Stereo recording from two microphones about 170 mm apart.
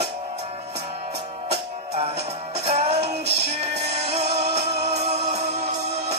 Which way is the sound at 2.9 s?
70° right (ahead or behind).